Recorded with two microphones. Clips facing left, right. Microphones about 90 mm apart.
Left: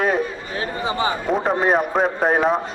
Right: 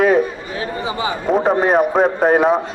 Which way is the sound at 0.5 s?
35° left (ahead or behind).